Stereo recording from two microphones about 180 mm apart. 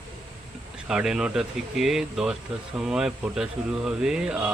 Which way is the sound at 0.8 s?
5° right (ahead or behind).